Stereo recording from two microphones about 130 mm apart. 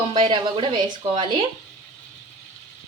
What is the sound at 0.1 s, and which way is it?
Speech, 35° right (ahead or behind).